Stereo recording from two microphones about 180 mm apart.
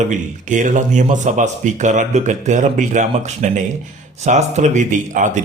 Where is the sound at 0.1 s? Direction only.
45° right (ahead or behind).